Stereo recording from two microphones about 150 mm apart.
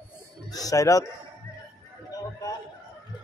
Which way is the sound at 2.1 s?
25° left (ahead or behind).